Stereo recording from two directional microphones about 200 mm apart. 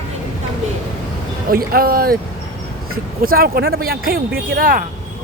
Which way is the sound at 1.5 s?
45° right (ahead or behind).